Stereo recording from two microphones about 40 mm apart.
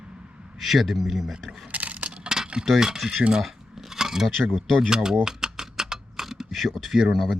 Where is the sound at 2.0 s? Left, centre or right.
Right.